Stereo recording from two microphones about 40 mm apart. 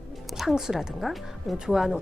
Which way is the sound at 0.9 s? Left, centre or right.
Centre.